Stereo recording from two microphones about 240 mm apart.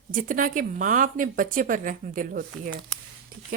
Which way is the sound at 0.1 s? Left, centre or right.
Right.